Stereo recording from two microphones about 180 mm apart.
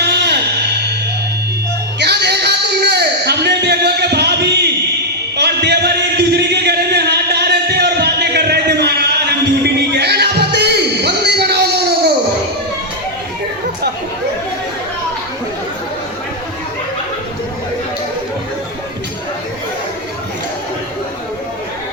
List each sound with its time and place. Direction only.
0.0 s music: 65° right (ahead or behind)
2.0 s a sound: 65° right (ahead or behind)
9.6 s music: 65° right (ahead or behind)